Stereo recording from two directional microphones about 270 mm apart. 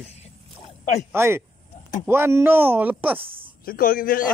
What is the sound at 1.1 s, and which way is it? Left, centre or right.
Speech, centre.